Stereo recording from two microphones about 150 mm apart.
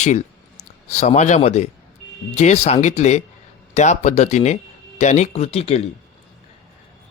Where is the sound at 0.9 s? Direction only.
50° left (ahead or behind).